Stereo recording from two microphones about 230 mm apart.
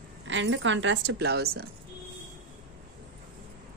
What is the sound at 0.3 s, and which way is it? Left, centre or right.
A woman's voice, right.